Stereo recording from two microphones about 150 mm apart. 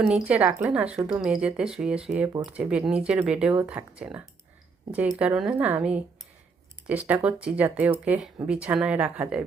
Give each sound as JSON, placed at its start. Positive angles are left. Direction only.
{"t": 0.1, "sound": "speech", "side_deg": -10}